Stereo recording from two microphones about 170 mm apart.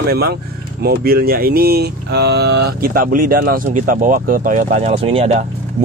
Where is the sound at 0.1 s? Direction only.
65° right (ahead or behind); by 4.9 s 50° right (ahead or behind).